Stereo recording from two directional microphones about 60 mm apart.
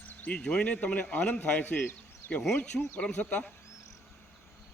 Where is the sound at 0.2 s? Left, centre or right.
Left.